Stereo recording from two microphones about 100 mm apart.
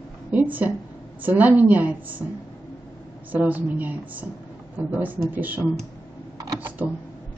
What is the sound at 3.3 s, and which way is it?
A woman's voice, 15° right (ahead or behind).